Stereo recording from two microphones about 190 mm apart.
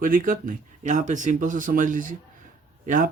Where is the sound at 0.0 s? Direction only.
45° right (ahead or behind).